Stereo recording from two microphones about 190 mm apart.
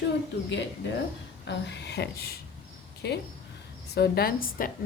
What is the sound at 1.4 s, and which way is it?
A woman's voice, 65° left (ahead or behind).